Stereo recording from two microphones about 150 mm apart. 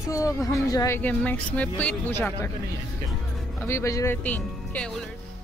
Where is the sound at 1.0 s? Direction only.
10° left (ahead or behind).